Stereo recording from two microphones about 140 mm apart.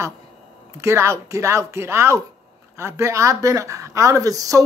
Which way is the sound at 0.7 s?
20° right (ahead or behind).